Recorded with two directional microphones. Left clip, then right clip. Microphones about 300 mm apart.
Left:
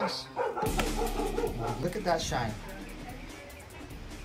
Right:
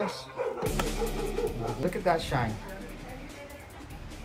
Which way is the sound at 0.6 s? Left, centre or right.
Centre.